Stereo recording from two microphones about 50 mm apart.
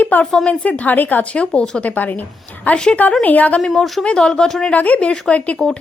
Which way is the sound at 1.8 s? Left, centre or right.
Left.